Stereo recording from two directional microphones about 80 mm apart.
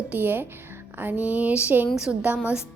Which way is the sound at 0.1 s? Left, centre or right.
Right.